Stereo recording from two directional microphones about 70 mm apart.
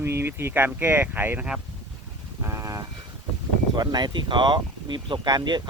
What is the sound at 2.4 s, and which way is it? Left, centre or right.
Vehicle, right.